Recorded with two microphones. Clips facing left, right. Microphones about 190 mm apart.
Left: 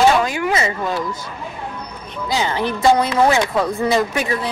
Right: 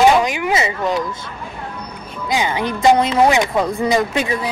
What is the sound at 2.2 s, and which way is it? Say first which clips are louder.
Speech: right 1 dB; 15° right (ahead or behind).